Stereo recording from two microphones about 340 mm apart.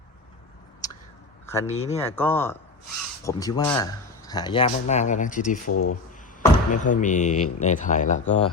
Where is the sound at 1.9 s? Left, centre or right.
Centre; by 5.7 s left.